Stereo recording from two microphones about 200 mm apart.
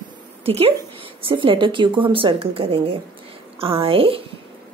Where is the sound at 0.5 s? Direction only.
30° right (ahead or behind).